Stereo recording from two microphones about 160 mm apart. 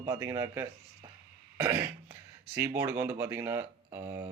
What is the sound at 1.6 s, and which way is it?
Cough, 15° right (ahead or behind).